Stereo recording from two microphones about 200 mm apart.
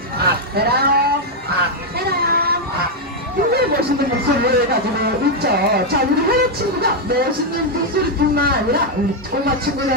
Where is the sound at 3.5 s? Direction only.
50° right (ahead or behind).